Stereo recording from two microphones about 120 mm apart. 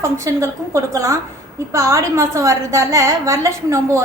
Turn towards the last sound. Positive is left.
turn(degrees=-25)  # may be behind; listen again after turning